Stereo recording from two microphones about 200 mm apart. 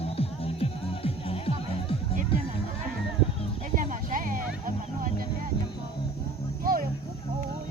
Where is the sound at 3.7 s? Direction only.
40° right (ahead or behind).